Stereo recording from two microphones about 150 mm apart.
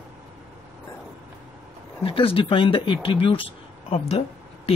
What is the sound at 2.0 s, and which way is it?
Speech, 35° left (ahead or behind).